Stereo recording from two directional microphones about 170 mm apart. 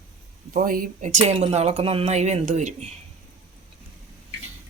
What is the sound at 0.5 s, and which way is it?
Speech, 55° right (ahead or behind).